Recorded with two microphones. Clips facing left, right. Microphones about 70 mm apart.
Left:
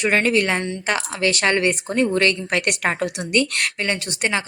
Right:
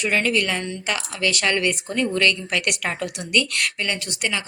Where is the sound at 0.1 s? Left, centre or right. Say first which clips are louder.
Left 3 dB; left.